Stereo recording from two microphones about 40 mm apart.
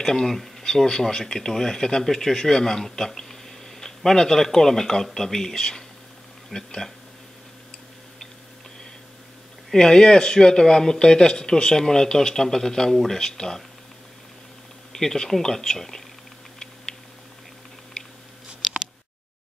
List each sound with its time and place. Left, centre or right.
0.0 s speech: centre
9.7 s speech: centre
14.9 s speech: centre
18.0 s a sound: left